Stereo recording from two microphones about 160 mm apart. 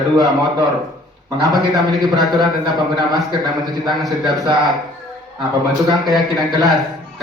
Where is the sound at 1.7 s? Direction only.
25° right (ahead or behind).